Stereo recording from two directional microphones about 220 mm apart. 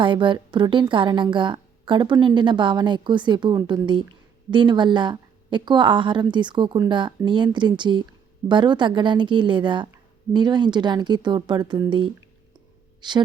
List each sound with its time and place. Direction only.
0.0 s a woman's voice: 20° right (ahead or behind)